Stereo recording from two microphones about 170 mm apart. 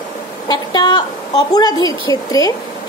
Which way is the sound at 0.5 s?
25° left (ahead or behind).